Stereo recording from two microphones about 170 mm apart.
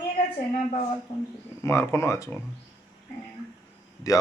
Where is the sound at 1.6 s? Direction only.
15° left (ahead or behind).